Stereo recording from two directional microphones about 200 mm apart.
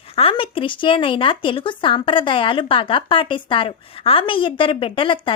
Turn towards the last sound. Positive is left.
turn(degrees=25)  # may be behind; listen again after turning